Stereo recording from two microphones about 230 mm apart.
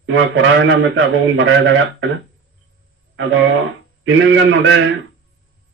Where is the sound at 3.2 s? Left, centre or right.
Right.